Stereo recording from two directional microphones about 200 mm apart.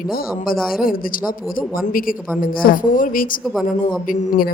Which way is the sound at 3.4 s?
5° right (ahead or behind).